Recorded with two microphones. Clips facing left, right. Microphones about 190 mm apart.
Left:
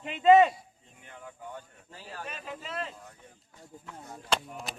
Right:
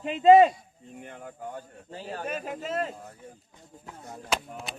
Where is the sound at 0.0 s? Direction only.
40° right (ahead or behind).